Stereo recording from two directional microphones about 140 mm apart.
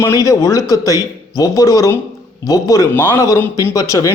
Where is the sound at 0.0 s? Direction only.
25° left (ahead or behind).